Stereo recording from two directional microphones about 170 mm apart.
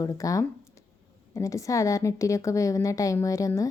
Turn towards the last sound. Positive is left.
turn(degrees=20)  # may be behind; listen again after turning